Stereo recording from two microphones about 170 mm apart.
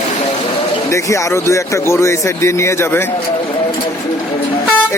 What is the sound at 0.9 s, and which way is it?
Speech, 20° left (ahead or behind).